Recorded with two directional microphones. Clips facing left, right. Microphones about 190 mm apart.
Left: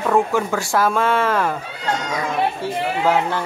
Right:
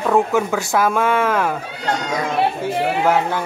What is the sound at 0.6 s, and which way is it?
Speech, 15° right (ahead or behind).